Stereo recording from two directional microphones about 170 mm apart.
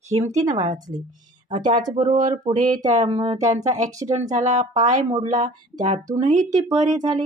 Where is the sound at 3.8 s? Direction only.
20° right (ahead or behind).